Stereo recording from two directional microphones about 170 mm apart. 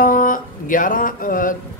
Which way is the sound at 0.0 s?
55° left (ahead or behind).